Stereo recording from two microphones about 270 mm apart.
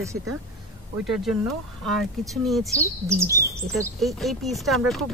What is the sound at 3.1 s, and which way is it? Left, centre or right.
Speech, centre.